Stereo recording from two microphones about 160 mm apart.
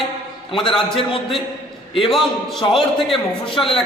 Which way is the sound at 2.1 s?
Centre (ahead or behind).